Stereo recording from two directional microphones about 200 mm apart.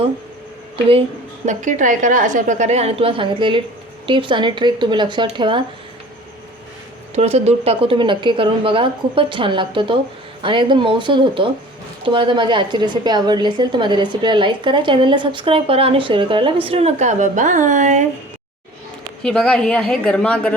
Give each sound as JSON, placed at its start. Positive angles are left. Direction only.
{"t": 1.5, "sound": "a woman's voice", "side_deg": -40}
{"t": 7.2, "sound": "a woman's voice", "side_deg": -30}
{"t": 19.2, "sound": "a woman's voice", "side_deg": 5}